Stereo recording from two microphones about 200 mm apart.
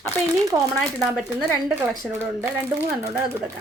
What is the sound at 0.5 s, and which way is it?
Speech, 20° right (ahead or behind).